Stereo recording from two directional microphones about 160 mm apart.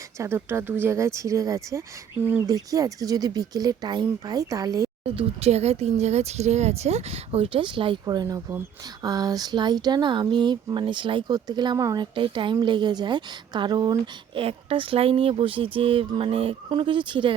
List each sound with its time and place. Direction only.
0.2 s speech: 15° right (ahead or behind)
5.0 s speech: 40° right (ahead or behind)